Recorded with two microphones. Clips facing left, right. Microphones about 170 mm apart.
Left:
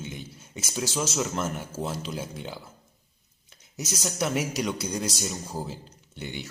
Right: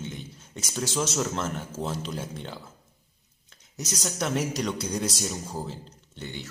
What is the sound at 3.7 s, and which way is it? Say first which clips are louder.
A woman's voice: left 1 dB; 5° left (ahead or behind).